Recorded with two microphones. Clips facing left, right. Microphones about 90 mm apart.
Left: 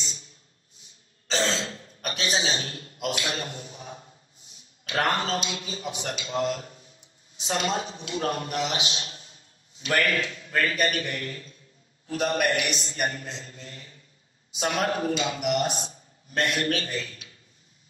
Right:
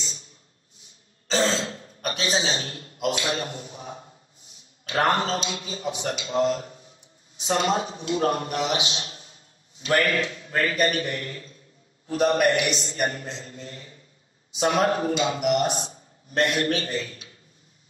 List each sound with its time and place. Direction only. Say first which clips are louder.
1.3 s throat clearing: right 3 dB; 35° right (ahead or behind)
4.8 s a man's voice: right 3 dB; 30° right (ahead or behind)